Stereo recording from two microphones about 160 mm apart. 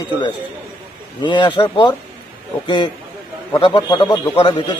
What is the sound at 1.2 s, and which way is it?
A man's voice, 30° left (ahead or behind).